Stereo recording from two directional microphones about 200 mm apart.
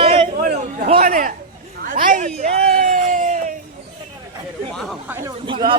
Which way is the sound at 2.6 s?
50° right (ahead or behind).